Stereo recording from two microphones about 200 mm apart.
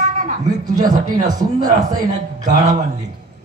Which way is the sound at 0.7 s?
40° right (ahead or behind).